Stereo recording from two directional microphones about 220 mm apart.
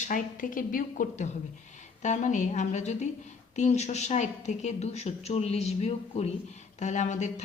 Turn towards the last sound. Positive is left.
turn(degrees=35)  # may be behind; listen again after turning